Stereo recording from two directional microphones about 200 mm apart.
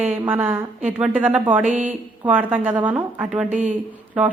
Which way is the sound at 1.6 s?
40° right (ahead or behind).